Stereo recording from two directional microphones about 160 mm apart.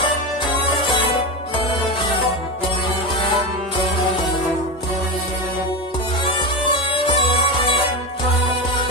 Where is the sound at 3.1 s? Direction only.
35° left (ahead or behind).